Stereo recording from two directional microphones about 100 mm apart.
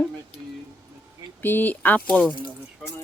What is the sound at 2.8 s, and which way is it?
Speech, centre (ahead or behind).